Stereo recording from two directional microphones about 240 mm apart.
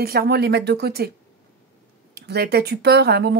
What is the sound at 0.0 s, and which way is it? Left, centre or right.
Speech, right.